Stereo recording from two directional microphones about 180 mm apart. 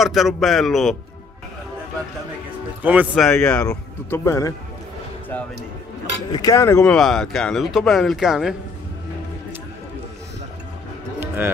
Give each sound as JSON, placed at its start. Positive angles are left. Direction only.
{"t": 0.0, "sound": "speech", "side_deg": 0}
{"t": 2.8, "sound": "speech", "side_deg": -10}
{"t": 3.3, "sound": "speech", "side_deg": 5}
{"t": 6.3, "sound": "speech", "side_deg": 20}
{"t": 6.8, "sound": "speech", "side_deg": 0}
{"t": 11.1, "sound": "music", "side_deg": -10}